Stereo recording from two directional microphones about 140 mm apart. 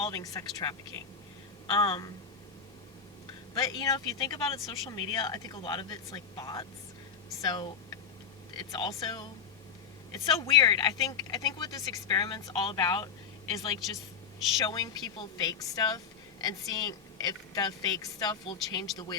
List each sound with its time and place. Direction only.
0.0 s speech: 25° left (ahead or behind)
3.5 s speech: 30° left (ahead or behind)
14.6 s speech: 25° left (ahead or behind)